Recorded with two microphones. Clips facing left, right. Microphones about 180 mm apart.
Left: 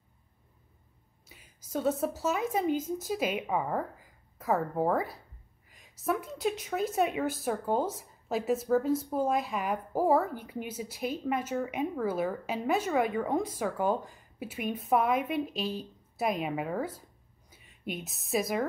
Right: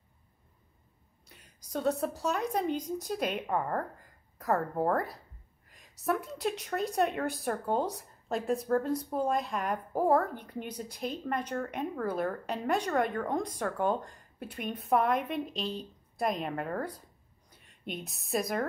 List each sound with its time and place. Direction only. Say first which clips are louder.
1.3 s a woman's voice: left 2 dB; centre (ahead or behind)